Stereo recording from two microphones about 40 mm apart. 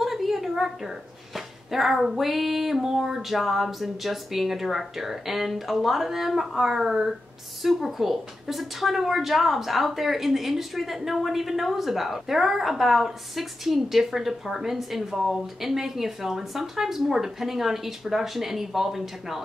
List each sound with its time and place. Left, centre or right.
0.0 s a woman's voice: centre